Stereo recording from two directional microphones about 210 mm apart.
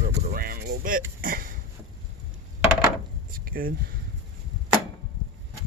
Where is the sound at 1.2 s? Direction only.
40° right (ahead or behind).